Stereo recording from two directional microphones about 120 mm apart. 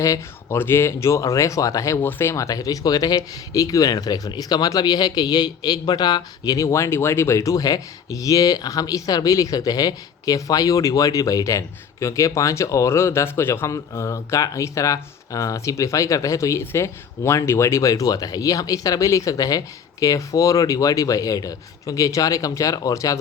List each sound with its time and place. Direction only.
0.0 s speech: 25° left (ahead or behind)